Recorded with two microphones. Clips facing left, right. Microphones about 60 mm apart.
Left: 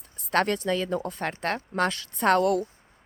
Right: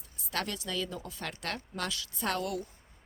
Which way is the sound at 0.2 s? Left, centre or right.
Left.